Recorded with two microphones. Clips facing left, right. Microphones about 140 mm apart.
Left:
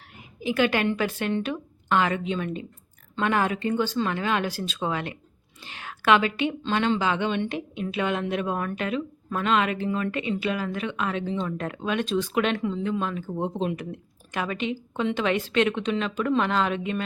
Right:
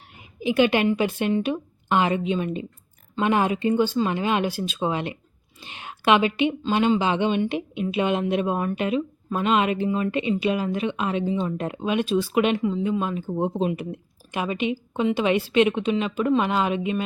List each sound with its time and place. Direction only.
0.4 s a woman's voice: 20° right (ahead or behind)